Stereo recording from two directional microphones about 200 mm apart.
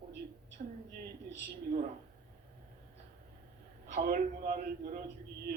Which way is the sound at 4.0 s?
45° right (ahead or behind).